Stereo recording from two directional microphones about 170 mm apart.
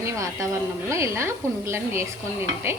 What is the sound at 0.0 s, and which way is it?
A woman's voice, 15° right (ahead or behind).